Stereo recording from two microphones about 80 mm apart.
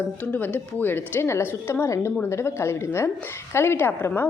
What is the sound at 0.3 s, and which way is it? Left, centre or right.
A woman's voice, left.